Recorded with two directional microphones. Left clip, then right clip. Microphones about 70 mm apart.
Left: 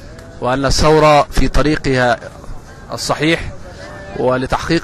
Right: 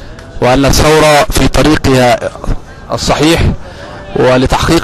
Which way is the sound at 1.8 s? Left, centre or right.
Right.